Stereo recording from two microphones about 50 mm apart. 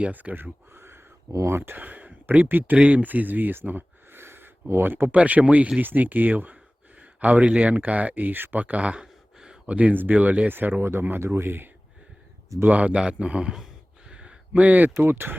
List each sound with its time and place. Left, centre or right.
0.0 s speech: right
0.7 s a sound: right
1.3 s speech: right
1.5 s speech: right
1.8 s a sound: right
2.4 s speech: right
5.1 s a man's voice: right
9.0 s a sound: centre
9.6 s speech: right
12.6 s a man's voice: right
14.1 s a sound: centre
14.5 s speech: right